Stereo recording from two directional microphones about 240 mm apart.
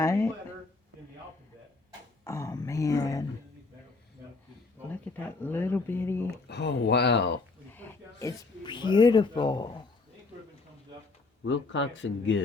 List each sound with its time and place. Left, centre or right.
0.0 s speech: centre
2.2 s speech: centre
5.1 s speech: centre
6.3 s speech: left
7.7 s snake: centre
8.6 s speech: centre
11.4 s speech: left